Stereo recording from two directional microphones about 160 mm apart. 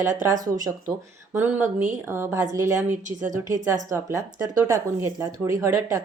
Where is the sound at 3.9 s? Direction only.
15° right (ahead or behind).